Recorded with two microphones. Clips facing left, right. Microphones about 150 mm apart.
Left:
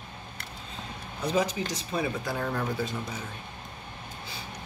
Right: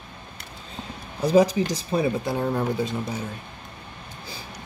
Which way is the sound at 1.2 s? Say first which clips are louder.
Right 9 dB; 35° right (ahead or behind).